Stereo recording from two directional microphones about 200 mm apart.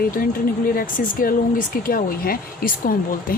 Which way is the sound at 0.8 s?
45° left (ahead or behind).